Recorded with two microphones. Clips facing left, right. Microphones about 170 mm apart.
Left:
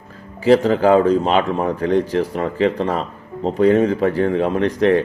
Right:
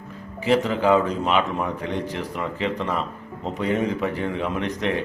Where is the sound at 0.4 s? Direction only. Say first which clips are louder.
Left 6 dB; 35° left (ahead or behind).